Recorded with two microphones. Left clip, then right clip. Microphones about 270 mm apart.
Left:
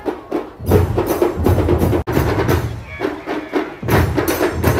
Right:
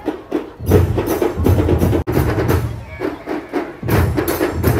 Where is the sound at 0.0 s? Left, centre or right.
Left.